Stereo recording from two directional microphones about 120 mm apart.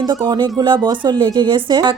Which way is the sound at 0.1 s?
40° right (ahead or behind).